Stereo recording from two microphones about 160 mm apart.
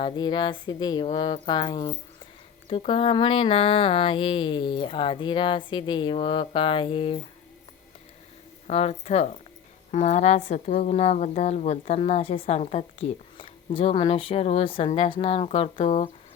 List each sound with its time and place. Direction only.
0.0 s a woman's voice: 25° left (ahead or behind)
8.6 s a woman's voice: 40° left (ahead or behind)